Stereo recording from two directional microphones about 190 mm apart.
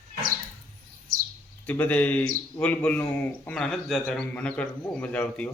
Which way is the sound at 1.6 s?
10° left (ahead or behind).